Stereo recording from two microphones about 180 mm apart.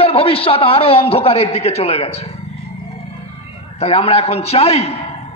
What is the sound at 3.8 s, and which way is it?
A man's voice, 35° left (ahead or behind).